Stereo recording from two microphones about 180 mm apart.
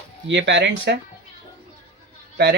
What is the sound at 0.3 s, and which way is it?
Speech, 80° right.